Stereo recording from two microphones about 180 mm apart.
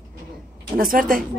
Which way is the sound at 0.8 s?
50° right (ahead or behind).